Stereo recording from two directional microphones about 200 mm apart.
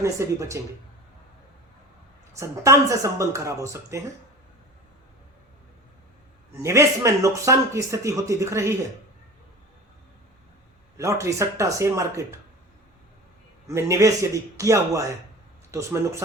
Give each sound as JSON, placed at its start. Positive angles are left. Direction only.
{"t": 0.0, "sound": "a man's voice", "side_deg": -15}
{"t": 2.4, "sound": "a man's voice", "side_deg": -15}
{"t": 6.6, "sound": "a man's voice", "side_deg": -15}
{"t": 10.9, "sound": "a man's voice", "side_deg": -15}
{"t": 13.7, "sound": "a man's voice", "side_deg": -15}